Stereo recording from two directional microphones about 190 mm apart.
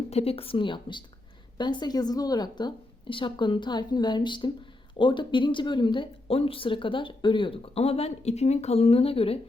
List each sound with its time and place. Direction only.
0.1 s speech: 30° left (ahead or behind)